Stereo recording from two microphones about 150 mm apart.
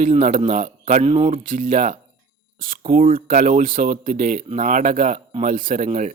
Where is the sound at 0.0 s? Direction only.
55° right (ahead or behind).